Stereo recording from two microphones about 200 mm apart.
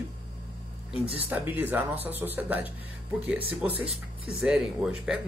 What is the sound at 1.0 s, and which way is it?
Speech, 30° right (ahead or behind).